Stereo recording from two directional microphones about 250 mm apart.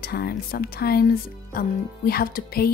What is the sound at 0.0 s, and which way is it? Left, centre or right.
Speech, left.